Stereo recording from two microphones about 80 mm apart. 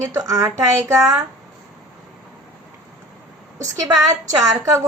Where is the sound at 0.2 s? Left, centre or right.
Right.